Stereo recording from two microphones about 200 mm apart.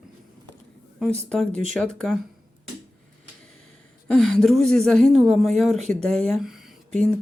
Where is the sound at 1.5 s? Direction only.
35° right (ahead or behind).